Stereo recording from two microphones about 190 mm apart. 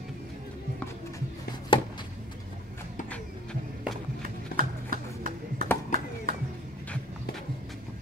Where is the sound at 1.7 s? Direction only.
25° left (ahead or behind).